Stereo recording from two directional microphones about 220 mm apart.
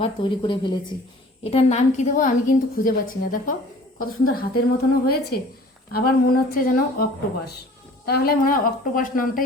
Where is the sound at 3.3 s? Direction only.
40° left (ahead or behind).